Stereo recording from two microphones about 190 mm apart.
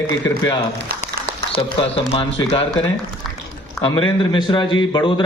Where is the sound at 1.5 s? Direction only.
30° left (ahead or behind).